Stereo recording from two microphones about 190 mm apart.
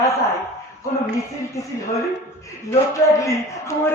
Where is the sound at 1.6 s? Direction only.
15° left (ahead or behind).